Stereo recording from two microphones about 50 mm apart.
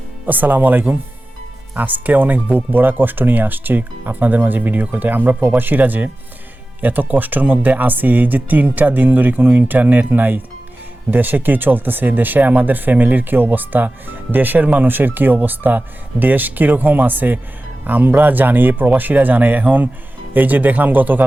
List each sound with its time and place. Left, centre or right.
0.3 s speech: right